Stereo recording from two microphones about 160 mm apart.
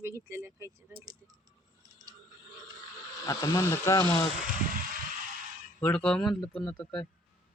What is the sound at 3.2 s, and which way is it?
Speech, 20° left (ahead or behind).